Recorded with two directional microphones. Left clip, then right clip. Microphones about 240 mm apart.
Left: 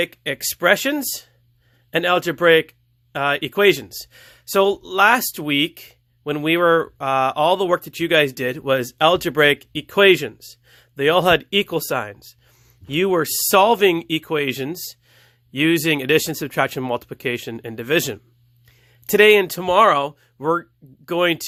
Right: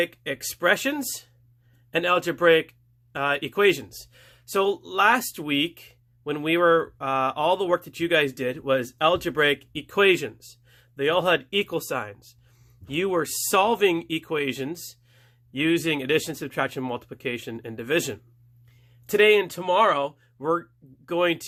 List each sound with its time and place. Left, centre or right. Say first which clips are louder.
0.0 s speech: left 4 dB; left